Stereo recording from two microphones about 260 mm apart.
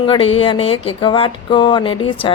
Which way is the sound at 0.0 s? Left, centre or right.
Centre.